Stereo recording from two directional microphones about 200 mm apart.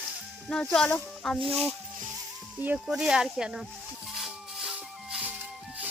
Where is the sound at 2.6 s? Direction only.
5° right (ahead or behind).